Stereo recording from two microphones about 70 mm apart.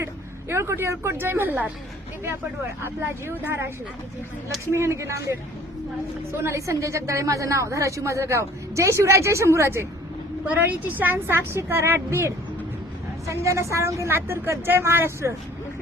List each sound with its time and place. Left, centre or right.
0.0 s a woman's voice: right
2.8 s a woman's voice: right
4.7 s a woman's voice: right
10.6 s a woman's voice: right
14.1 s a woman's voice: right